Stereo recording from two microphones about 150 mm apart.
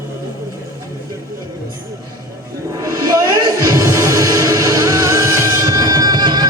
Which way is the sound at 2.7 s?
25° right (ahead or behind).